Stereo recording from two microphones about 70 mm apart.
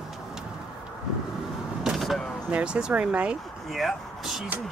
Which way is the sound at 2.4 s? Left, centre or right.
Centre.